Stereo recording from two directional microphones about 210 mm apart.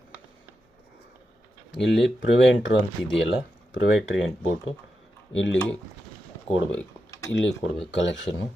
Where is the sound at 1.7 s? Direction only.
55° left (ahead or behind).